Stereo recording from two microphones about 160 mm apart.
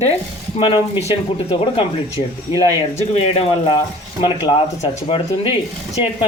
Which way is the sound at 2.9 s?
40° left (ahead or behind).